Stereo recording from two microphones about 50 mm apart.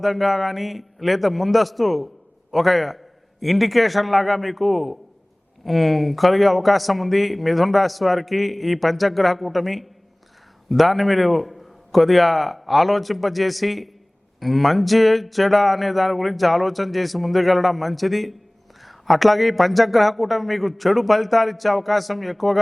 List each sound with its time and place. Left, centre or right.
0.0 s a man's voice: centre